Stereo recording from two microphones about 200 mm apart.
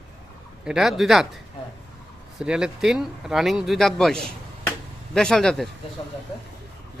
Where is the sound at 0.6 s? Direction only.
Centre (ahead or behind).